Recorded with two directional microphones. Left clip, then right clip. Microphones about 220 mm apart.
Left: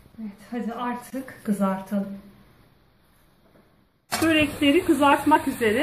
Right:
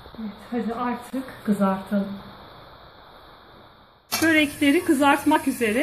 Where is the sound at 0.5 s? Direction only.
5° right (ahead or behind).